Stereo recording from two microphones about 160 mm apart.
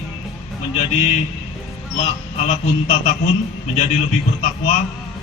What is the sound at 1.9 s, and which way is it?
A man's voice, 45° left (ahead or behind).